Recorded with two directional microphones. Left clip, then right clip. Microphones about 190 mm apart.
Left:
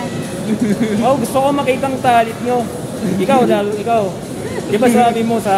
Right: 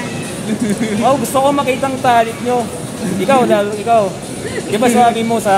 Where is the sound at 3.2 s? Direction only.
10° right (ahead or behind).